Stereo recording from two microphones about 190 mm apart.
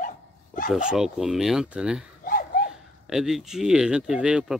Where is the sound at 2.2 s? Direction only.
45° left (ahead or behind).